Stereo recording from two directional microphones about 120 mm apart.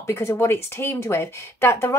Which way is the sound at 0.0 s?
20° left (ahead or behind).